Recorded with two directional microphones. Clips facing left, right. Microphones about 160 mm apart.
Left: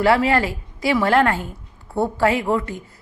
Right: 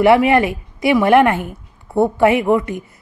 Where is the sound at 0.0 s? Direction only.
20° right (ahead or behind).